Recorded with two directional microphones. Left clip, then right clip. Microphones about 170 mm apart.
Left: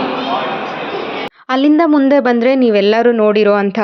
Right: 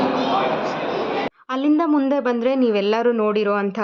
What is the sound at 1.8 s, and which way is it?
Speech, 25° left (ahead or behind).